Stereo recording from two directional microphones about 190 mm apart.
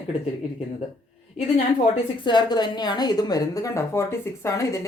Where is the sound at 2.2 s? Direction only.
25° left (ahead or behind).